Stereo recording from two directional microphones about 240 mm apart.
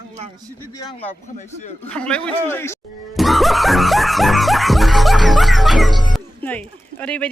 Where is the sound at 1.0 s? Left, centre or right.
Left.